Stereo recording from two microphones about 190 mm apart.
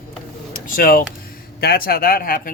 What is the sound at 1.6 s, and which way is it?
Speech, 55° left (ahead or behind).